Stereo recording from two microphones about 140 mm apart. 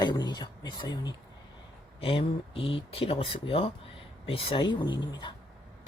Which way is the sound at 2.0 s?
40° left (ahead or behind).